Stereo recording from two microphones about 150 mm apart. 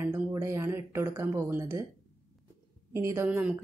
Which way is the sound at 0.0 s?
20° right (ahead or behind).